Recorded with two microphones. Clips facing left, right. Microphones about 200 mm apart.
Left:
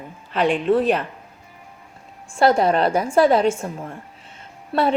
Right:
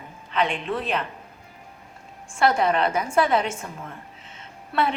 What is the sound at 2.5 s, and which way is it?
Speech, 40° left (ahead or behind).